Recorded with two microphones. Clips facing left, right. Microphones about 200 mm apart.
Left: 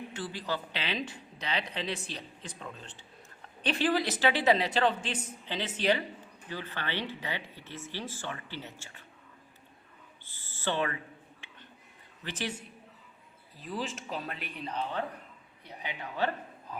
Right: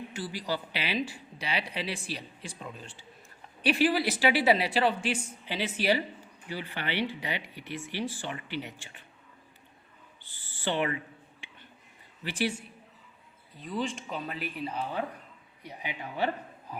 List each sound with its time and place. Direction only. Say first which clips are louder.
0.1 s speech: right 2 dB; 10° right (ahead or behind)
10.2 s owl: right 1 dB; 15° right (ahead or behind)
11.4 s a sound: right 2 dB; 15° right (ahead or behind)
12.2 s speech: right 6 dB; 10° right (ahead or behind)
13.6 s speech: right 3 dB; centre (ahead or behind)